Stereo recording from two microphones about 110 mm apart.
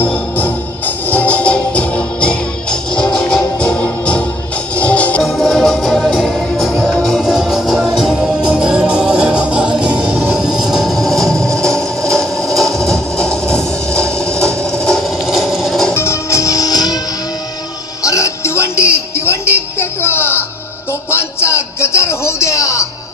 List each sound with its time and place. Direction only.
0.0 s music: 15° left (ahead or behind)
5.2 s music: centre (ahead or behind)
15.9 s music: 25° left (ahead or behind)
18.0 s music: 30° left (ahead or behind)